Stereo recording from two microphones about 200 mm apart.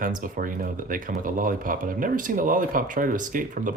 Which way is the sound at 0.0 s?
45° right (ahead or behind).